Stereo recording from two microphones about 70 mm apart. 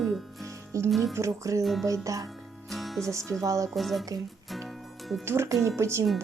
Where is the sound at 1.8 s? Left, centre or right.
Right.